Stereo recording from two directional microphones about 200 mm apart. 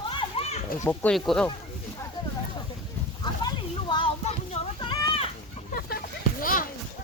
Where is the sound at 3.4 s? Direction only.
25° left (ahead or behind).